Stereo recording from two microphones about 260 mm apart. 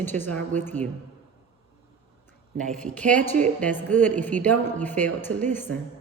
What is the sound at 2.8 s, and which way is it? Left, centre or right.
A woman's voice, centre.